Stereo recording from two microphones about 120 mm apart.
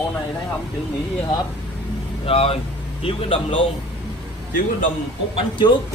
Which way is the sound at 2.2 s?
55° left (ahead or behind).